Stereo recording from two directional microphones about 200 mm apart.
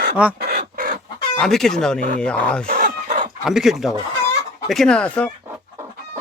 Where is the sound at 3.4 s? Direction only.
Centre (ahead or behind).